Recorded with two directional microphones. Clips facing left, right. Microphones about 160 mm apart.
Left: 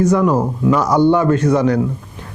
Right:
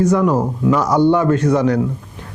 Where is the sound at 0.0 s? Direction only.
20° left (ahead or behind).